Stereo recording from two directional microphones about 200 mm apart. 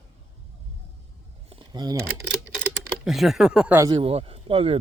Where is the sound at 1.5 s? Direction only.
25° right (ahead or behind).